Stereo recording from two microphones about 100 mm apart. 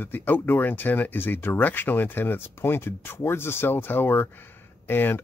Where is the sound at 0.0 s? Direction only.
20° left (ahead or behind).